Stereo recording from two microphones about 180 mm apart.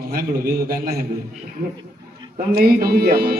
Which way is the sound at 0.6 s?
55° right (ahead or behind).